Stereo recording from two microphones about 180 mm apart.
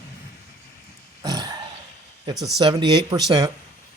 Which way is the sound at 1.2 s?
20° right (ahead or behind).